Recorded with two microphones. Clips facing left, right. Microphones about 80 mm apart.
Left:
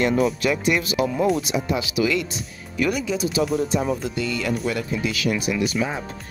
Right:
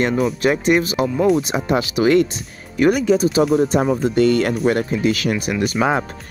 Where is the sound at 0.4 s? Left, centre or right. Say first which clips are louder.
Right 5 dB; right.